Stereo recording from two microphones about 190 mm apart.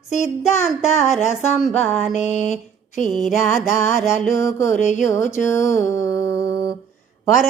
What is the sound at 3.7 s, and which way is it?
Music, 40° left (ahead or behind).